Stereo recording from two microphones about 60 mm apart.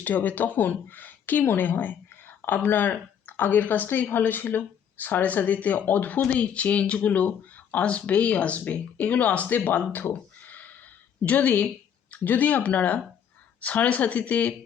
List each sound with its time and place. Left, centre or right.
0.0 s a woman's voice: left
9.9 s a sound: left
12.1 s a woman's voice: left